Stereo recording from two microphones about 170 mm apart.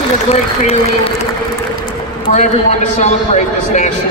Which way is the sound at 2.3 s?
45° left (ahead or behind).